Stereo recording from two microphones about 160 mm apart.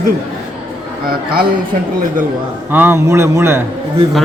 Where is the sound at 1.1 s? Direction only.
70° right (ahead or behind).